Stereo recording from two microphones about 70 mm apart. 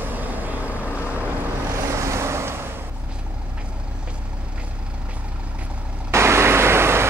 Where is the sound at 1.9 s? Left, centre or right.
Right.